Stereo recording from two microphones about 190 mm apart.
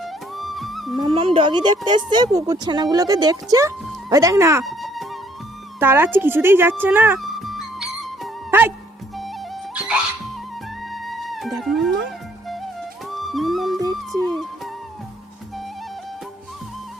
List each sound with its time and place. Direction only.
0.0 s music: centre (ahead or behind)
1.0 s a woman's voice: 30° right (ahead or behind)
4.6 s music: centre (ahead or behind)
5.8 s speech: 10° right (ahead or behind)
7.2 s music: centre (ahead or behind)
8.4 s music: 10° right (ahead or behind)
9.7 s music: 5° right (ahead or behind)